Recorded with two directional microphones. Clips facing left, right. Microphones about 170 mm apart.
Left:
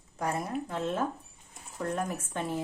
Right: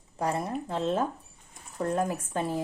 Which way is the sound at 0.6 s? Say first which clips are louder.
Right 4 dB; 30° right (ahead or behind).